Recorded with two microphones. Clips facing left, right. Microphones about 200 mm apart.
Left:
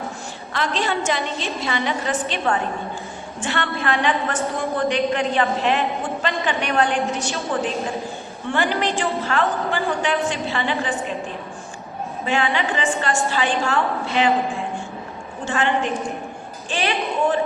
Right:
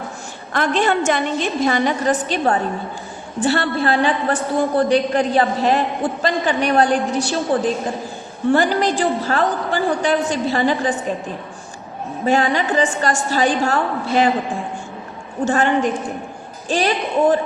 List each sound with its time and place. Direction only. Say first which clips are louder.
0.5 s a woman's voice: right 6 dB; 50° right (ahead or behind); by 10.9 s 35° right (ahead or behind)
12.2 s a man's voice: right 5 dB; 40° right (ahead or behind)
15.4 s a woman's voice: right 4 dB; 45° right (ahead or behind)